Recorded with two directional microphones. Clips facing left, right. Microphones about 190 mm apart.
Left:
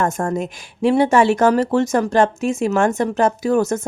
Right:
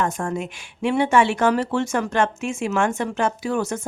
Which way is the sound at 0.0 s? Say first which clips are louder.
Left 4 dB; 40° left (ahead or behind).